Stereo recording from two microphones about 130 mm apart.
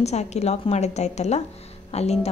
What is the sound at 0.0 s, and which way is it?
A woman's voice, 60° left (ahead or behind).